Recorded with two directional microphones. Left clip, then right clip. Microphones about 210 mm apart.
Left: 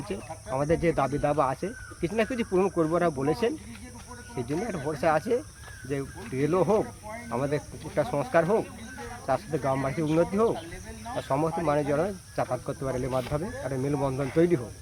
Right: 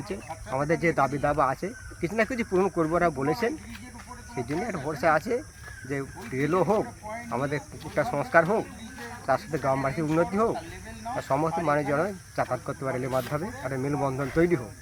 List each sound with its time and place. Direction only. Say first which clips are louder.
0.1 s speech: right 1 dB; 5° left (ahead or behind)
4.6 s speech: right 1 dB; 5° left (ahead or behind)